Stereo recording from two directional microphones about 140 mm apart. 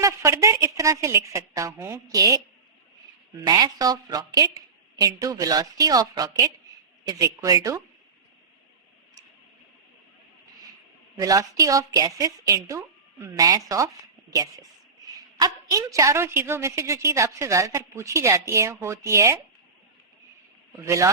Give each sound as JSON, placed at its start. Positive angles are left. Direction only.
{"t": 0.0, "sound": "a woman's voice", "side_deg": -20}
{"t": 3.4, "sound": "a woman's voice", "side_deg": -25}
{"t": 11.2, "sound": "a woman's voice", "side_deg": -25}
{"t": 20.8, "sound": "a woman's voice", "side_deg": -20}